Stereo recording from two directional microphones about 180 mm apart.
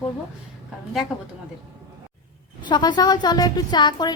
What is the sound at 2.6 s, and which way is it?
A woman's voice, 25° left (ahead or behind).